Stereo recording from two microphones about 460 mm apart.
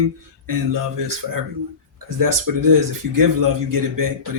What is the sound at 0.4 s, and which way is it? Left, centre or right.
Speech, right.